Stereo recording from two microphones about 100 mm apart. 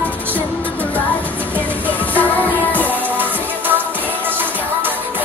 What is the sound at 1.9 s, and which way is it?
Music, 15° left (ahead or behind).